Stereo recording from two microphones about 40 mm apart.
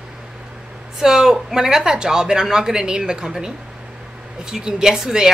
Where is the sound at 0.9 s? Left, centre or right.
Centre.